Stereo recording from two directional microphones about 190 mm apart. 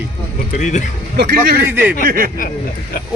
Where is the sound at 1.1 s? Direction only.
50° right (ahead or behind).